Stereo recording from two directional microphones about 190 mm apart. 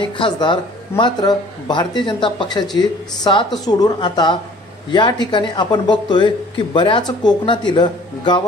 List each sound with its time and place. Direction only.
0.2 s speech: 25° left (ahead or behind)